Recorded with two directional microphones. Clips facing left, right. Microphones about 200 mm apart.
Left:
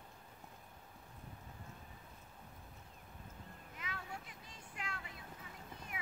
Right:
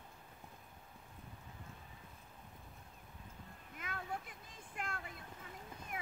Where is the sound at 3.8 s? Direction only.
50° right (ahead or behind).